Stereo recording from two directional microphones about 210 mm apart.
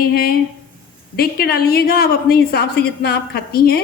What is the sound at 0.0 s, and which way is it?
A woman's voice, 45° left (ahead or behind).